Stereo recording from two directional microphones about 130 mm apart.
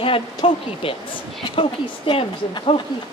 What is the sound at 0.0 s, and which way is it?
A woman's voice, 45° left (ahead or behind).